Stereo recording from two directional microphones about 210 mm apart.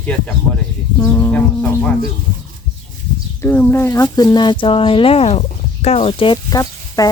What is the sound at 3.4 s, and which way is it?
Speech, 10° left (ahead or behind).